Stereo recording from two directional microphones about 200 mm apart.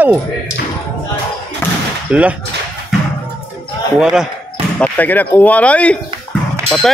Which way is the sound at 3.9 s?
5° right (ahead or behind).